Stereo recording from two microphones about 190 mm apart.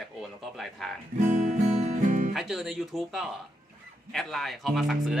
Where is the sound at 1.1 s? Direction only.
40° right (ahead or behind).